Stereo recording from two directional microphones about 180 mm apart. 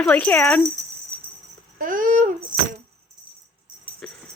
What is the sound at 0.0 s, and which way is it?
Speech, 5° left (ahead or behind).